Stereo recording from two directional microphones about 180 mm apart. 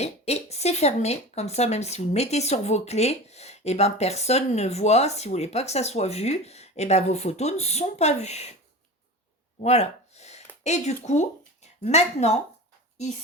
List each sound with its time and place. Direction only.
0.0 s speech: 35° left (ahead or behind)
9.6 s a sound: 35° left (ahead or behind)
11.8 s speech: 35° left (ahead or behind)